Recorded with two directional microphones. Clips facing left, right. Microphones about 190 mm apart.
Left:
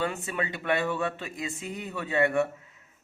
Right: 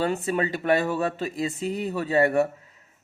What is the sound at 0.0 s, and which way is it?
Speech, 35° right (ahead or behind).